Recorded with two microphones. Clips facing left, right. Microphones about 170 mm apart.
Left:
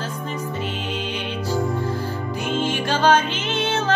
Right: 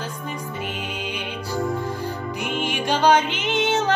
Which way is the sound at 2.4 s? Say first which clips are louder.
Left 2 dB; 15° right (ahead or behind).